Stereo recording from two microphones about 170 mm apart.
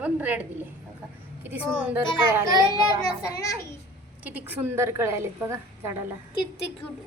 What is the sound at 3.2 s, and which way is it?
Speech, 20° left (ahead or behind).